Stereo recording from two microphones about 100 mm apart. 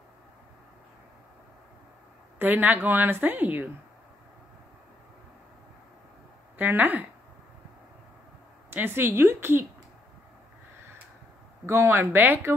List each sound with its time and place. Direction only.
2.3 s a woman's voice: 20° right (ahead or behind)
6.6 s speech: 20° right (ahead or behind)
8.6 s a woman's voice: 20° right (ahead or behind)
11.6 s a woman's voice: 25° right (ahead or behind)